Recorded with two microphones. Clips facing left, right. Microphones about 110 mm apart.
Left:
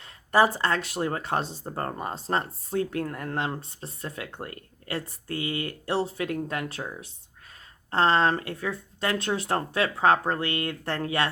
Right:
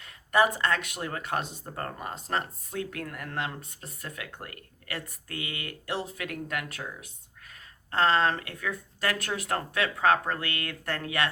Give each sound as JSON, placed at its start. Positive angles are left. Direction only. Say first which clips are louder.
{"t": 0.0, "sound": "speech", "louder": "left 3 dB", "side_deg": 30}